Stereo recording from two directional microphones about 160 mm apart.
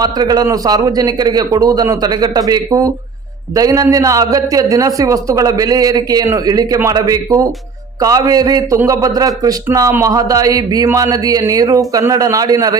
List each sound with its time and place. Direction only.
0.0 s a man's voice: 25° right (ahead or behind)